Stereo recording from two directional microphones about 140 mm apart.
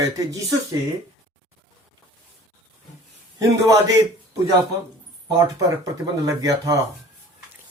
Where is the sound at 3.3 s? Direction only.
25° right (ahead or behind).